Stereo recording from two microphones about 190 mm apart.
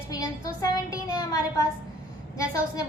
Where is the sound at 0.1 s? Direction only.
20° left (ahead or behind).